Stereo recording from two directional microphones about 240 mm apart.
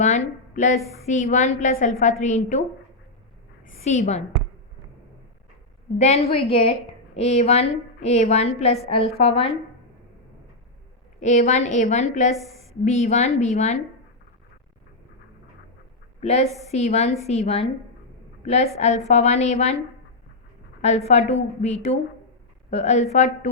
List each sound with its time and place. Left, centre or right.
0.0 s a sound: left
1.0 s a woman's voice: left
3.7 s a woman's voice: left
6.0 s a woman's voice: left
11.2 s a woman's voice: left
16.2 s a woman's voice: left
20.8 s a woman's voice: left